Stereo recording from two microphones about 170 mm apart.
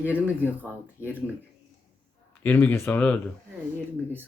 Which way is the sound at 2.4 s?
10° left (ahead or behind).